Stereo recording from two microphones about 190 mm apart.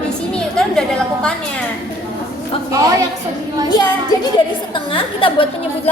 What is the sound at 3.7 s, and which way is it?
A woman's voice, 20° left (ahead or behind).